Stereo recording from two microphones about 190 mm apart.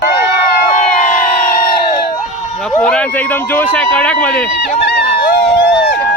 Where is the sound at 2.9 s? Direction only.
5° left (ahead or behind).